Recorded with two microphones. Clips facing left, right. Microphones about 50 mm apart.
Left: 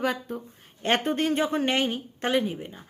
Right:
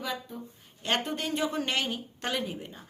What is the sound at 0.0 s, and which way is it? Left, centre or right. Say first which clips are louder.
A woman's voice: left 7 dB; left.